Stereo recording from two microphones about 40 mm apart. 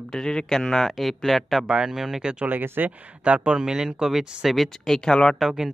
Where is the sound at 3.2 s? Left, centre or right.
Right.